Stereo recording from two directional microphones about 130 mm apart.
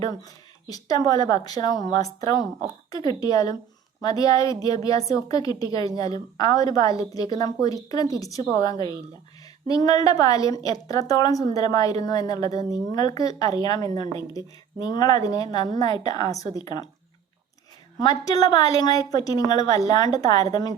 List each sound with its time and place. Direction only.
0.0 s a woman's voice: 30° left (ahead or behind)
18.0 s a woman's voice: 30° left (ahead or behind)